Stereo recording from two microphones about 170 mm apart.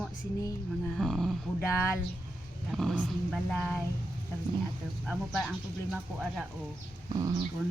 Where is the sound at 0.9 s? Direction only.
Centre (ahead or behind).